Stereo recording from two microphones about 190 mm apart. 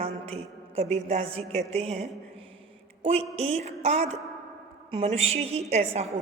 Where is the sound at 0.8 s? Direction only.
35° right (ahead or behind).